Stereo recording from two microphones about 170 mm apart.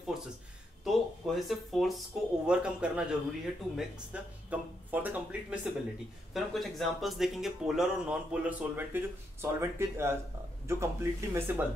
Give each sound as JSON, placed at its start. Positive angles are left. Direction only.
{"t": 0.8, "sound": "speech", "side_deg": 0}